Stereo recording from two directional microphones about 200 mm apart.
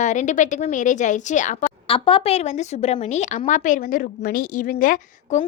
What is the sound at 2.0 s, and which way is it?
Speech, 30° left (ahead or behind).